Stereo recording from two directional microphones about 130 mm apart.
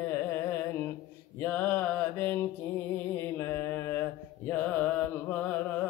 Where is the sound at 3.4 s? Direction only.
15° left (ahead or behind).